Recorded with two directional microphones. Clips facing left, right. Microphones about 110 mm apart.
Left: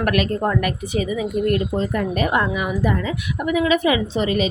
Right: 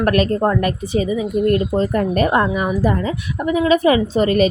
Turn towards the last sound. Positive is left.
turn(degrees=-50)  # may be behind; listen again after turning